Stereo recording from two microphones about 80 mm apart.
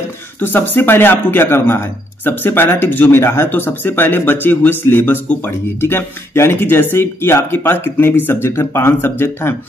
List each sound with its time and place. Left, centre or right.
0.4 s a man's voice: left